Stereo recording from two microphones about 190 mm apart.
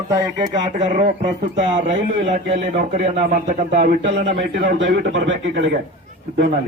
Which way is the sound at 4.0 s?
70° right (ahead or behind).